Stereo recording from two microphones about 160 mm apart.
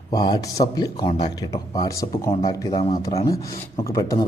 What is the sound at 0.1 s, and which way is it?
A man's voice, 25° left (ahead or behind).